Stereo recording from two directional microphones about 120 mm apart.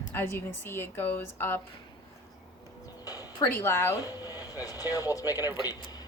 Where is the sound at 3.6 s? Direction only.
20° left (ahead or behind).